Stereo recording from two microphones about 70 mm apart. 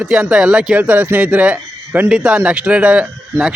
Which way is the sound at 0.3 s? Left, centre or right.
Centre.